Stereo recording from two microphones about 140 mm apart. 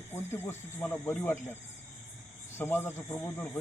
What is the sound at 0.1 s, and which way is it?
Speech, 15° left (ahead or behind).